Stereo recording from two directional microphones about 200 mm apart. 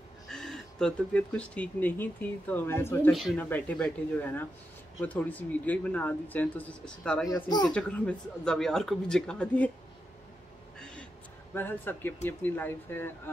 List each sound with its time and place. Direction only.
0.3 s speech: centre (ahead or behind)
3.1 s speech: centre (ahead or behind)
7.2 s speech: 20° left (ahead or behind)
7.7 s speech: 5° left (ahead or behind)
11.5 s speech: 10° left (ahead or behind)